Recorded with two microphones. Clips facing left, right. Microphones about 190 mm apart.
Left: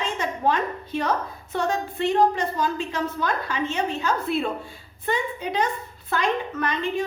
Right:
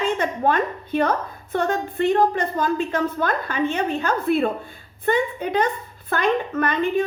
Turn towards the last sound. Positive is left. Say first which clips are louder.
# right 5 dB
turn(degrees=-55)  # may be behind; listen again after turning